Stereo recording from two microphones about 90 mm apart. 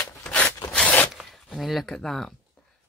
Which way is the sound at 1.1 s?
Centre (ahead or behind).